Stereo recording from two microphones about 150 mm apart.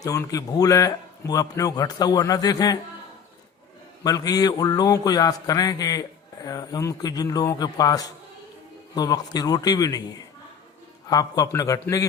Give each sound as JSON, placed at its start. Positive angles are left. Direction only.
{"t": 0.0, "sound": "a man's voice", "side_deg": 20}
{"t": 4.0, "sound": "a man's voice", "side_deg": 25}